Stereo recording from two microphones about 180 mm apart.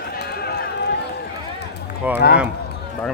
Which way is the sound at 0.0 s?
60° left (ahead or behind).